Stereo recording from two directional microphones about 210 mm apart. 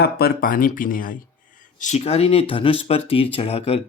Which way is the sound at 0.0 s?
45° left (ahead or behind).